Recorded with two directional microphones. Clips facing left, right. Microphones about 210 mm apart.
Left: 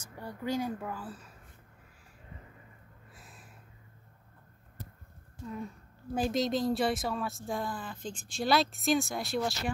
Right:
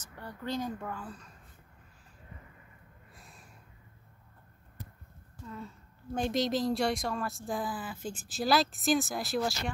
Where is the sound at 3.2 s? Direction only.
Centre (ahead or behind).